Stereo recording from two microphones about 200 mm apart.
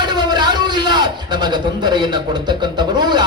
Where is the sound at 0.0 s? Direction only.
20° right (ahead or behind).